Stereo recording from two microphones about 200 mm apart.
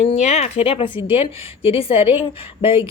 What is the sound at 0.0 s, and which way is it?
A woman's voice, 35° left (ahead or behind).